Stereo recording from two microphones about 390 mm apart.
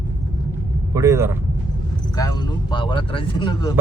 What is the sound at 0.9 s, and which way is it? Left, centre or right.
Speech, centre.